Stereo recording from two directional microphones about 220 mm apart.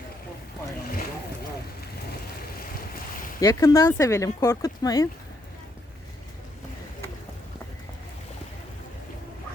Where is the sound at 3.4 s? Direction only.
15° left (ahead or behind).